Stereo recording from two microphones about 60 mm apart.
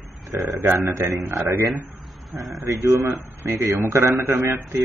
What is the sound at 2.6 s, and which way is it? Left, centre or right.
Speech, right.